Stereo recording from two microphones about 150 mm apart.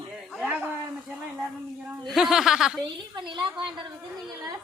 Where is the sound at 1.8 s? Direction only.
Centre (ahead or behind).